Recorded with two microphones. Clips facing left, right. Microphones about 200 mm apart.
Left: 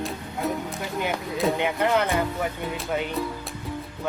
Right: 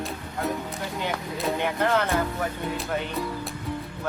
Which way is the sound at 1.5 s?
15° left (ahead or behind).